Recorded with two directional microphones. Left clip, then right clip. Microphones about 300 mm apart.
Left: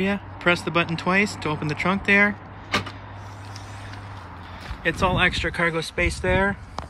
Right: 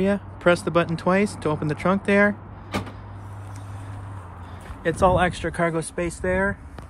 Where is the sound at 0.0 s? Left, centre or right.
Centre.